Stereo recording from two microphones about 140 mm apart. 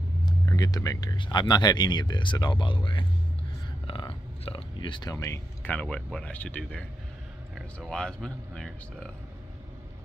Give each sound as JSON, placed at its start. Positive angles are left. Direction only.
{"t": 0.2, "sound": "speech", "side_deg": 25}
{"t": 5.1, "sound": "speech", "side_deg": 20}